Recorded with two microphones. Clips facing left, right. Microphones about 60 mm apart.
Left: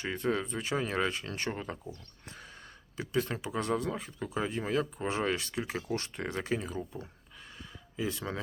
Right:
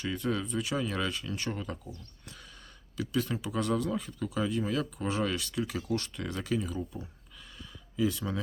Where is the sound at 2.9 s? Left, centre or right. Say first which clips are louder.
Right 1 dB; left.